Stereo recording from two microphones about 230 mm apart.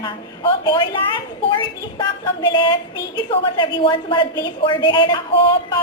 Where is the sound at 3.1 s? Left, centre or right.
Left.